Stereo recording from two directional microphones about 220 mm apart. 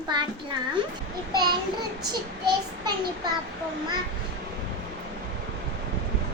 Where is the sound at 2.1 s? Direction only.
20° right (ahead or behind).